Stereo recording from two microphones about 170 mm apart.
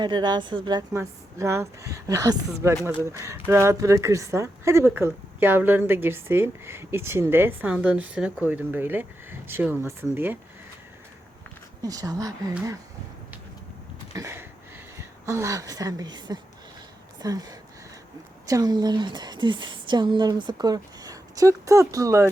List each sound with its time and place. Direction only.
0.0 s a woman's voice: 25° right (ahead or behind)
11.8 s a woman's voice: 20° right (ahead or behind)
14.1 s a sound: 15° right (ahead or behind)
14.9 s a woman's voice: 15° right (ahead or behind)